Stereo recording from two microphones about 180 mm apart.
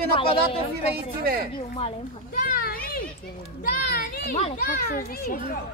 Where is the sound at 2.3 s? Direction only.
50° left (ahead or behind).